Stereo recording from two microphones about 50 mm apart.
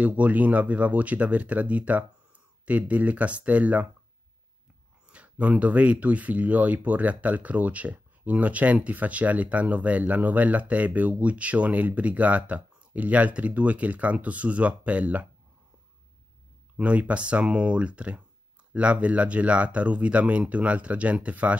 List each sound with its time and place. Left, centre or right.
0.0 s speech: right
5.0 s speech: right
16.7 s speech: right